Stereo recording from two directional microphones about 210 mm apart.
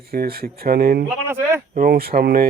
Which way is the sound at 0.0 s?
45° right (ahead or behind).